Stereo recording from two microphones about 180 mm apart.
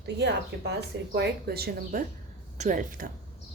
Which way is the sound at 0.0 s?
70° right (ahead or behind).